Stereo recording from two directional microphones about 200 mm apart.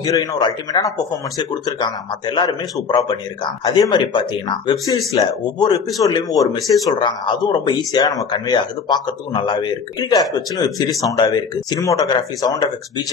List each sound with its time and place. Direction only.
0.0 s a man's voice: 15° left (ahead or behind)